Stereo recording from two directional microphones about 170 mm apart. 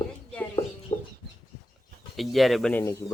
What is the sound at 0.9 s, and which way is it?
Chicken, 40° left (ahead or behind).